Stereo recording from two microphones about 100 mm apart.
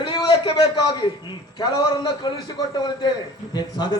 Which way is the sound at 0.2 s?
45° left (ahead or behind).